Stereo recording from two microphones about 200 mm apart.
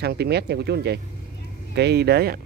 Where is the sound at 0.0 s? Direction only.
55° right (ahead or behind).